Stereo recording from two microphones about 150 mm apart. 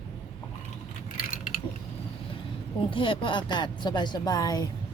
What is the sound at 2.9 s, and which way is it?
Speech, 35° left (ahead or behind).